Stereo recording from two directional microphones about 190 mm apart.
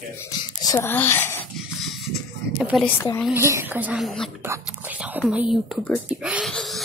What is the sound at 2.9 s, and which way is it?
Speech, 10° left (ahead or behind).